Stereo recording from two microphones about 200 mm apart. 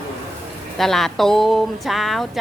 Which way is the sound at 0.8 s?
Centre (ahead or behind).